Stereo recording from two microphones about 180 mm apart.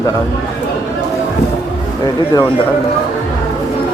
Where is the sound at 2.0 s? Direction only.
20° left (ahead or behind).